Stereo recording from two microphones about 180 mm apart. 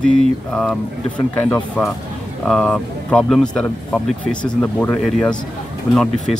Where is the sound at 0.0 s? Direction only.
5° left (ahead or behind).